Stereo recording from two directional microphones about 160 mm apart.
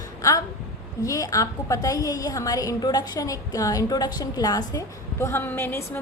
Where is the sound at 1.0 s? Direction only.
20° left (ahead or behind).